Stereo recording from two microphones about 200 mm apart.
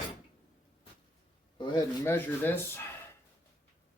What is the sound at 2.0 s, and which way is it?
Speech, 10° left (ahead or behind).